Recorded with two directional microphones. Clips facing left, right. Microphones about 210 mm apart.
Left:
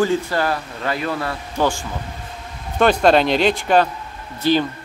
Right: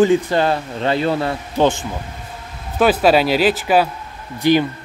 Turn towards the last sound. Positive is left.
turn(degrees=-15)  # may be behind; listen again after turning